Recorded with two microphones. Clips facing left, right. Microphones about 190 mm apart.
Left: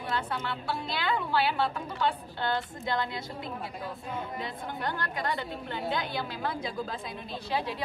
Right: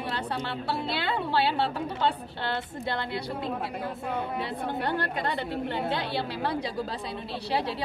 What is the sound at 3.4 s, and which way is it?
A woman's voice, 70° right (ahead or behind).